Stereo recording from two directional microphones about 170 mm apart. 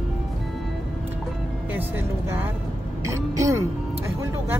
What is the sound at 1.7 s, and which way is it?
Speech, 10° right (ahead or behind).